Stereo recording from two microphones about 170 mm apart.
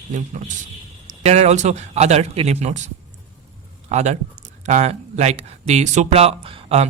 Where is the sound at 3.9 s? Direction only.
40° right (ahead or behind).